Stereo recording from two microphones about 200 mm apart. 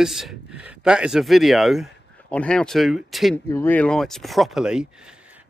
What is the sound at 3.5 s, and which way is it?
Speech, 10° left (ahead or behind).